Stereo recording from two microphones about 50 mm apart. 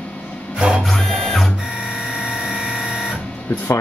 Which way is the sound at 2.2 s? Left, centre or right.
Right.